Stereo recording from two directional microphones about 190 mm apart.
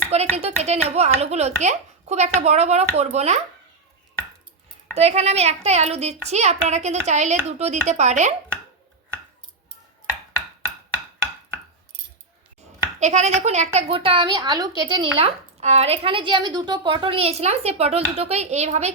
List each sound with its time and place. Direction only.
0.1 s a woman's voice: 35° right (ahead or behind)
4.9 s a woman's voice: 35° right (ahead or behind)
13.0 s a woman's voice: 35° right (ahead or behind)
15.2 s a woman's voice: 35° right (ahead or behind)